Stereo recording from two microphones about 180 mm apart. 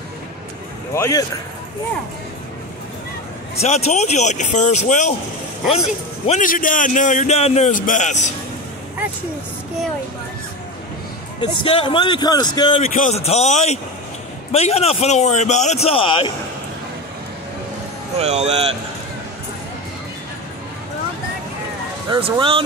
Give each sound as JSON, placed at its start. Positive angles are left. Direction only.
{"t": 0.9, "sound": "speech", "side_deg": 15}
{"t": 3.5, "sound": "a man's voice", "side_deg": 35}
{"t": 6.2, "sound": "a man's voice", "side_deg": 45}
{"t": 11.4, "sound": "speech", "side_deg": 30}
{"t": 12.9, "sound": "a man's voice", "side_deg": 40}
{"t": 18.2, "sound": "speech", "side_deg": -35}
{"t": 22.1, "sound": "speech", "side_deg": -30}